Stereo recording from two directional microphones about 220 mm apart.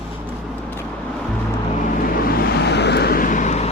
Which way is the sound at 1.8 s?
40° left (ahead or behind).